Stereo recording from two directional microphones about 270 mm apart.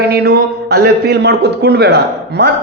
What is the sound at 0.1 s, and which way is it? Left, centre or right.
A man's voice, right.